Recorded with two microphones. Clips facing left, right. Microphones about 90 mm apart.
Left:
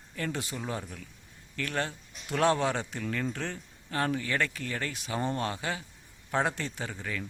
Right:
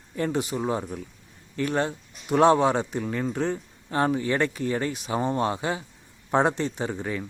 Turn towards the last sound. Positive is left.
turn(degrees=-25)  # may be behind; listen again after turning